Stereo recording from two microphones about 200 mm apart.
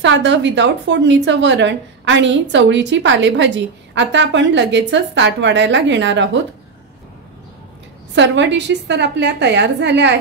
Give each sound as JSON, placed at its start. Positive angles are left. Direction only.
{"t": 0.0, "sound": "a woman's voice", "side_deg": -65}
{"t": 8.1, "sound": "a woman's voice", "side_deg": -65}